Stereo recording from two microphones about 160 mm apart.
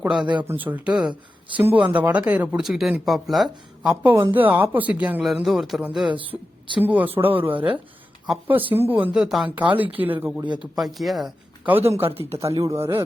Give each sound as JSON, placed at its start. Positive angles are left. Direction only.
{"t": 0.3, "sound": "speech", "side_deg": -10}
{"t": 6.3, "sound": "speech", "side_deg": -15}
{"t": 10.6, "sound": "speech", "side_deg": 0}
{"t": 11.7, "sound": "speech", "side_deg": -15}